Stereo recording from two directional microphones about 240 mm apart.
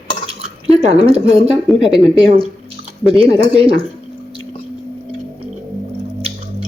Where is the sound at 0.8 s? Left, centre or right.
Right.